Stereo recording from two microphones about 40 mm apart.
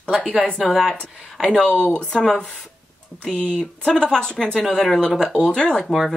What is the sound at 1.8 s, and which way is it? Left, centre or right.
Speech, left.